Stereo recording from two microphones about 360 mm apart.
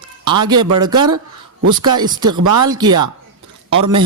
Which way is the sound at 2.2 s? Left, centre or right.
Right.